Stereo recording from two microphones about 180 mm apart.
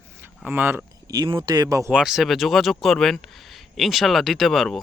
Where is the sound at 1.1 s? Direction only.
25° right (ahead or behind).